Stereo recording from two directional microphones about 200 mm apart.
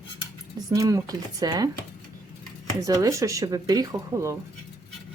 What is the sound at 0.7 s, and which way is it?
Speech, 20° right (ahead or behind).